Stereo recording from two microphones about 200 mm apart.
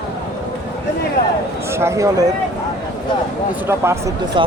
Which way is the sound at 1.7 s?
15° right (ahead or behind).